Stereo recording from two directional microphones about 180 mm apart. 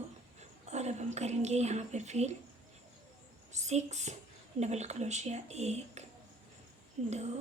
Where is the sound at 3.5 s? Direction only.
40° right (ahead or behind).